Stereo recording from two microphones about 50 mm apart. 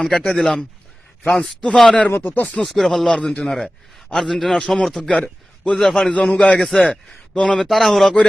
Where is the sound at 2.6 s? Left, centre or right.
Centre.